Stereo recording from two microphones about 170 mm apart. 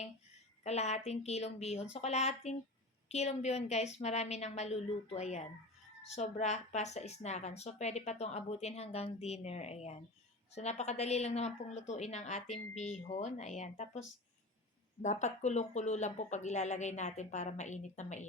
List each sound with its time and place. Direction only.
0.6 s speech: 40° left (ahead or behind)
15.0 s speech: 45° left (ahead or behind)